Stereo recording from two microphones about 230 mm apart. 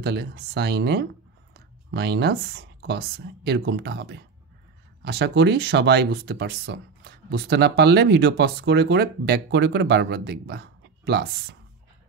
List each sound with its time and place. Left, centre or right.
0.0 s speech: right